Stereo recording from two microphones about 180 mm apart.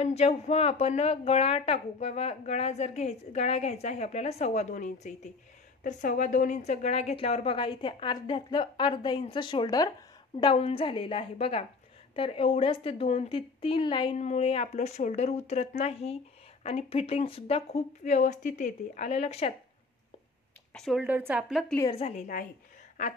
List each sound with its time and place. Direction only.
0.0 s a woman's voice: 35° left (ahead or behind)
14.1 s a woman's voice: 40° left (ahead or behind)
20.7 s a woman's voice: centre (ahead or behind)
21.0 s a woman's voice: 10° right (ahead or behind)
21.9 s a woman's voice: 35° left (ahead or behind)